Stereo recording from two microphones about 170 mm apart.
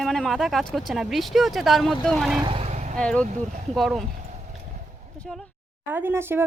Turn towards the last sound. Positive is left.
turn(degrees=-15)  # may be behind; listen again after turning